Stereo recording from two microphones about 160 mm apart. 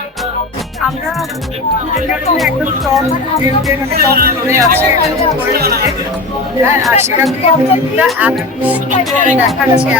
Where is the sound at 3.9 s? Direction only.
70° right (ahead or behind).